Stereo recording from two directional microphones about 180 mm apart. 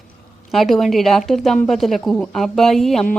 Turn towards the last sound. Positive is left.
turn(degrees=5)  # may be behind; listen again after turning